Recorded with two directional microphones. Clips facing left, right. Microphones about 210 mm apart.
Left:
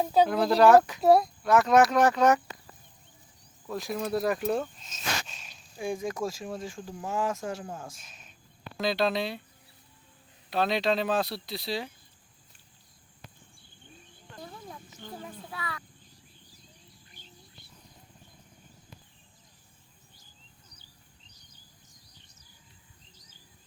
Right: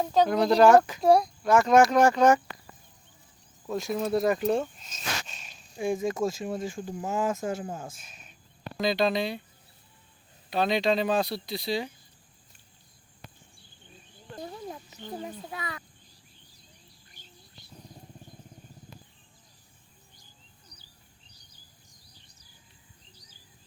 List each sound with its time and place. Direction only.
0.0 s a child's voice: 10° left (ahead or behind)
3.7 s a child's voice: centre (ahead or behind)
3.9 s a child's voice: 20° right (ahead or behind)
4.2 s a child's voice: centre (ahead or behind)
4.8 s a sound: centre (ahead or behind)
6.6 s a child's voice: 5° right (ahead or behind)
10.5 s a child's voice: centre (ahead or behind)
15.0 s a child's voice: 20° right (ahead or behind)